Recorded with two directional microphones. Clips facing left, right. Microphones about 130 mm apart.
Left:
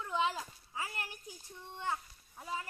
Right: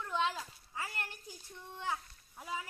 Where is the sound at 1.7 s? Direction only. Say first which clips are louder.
Left 1 dB; centre (ahead or behind).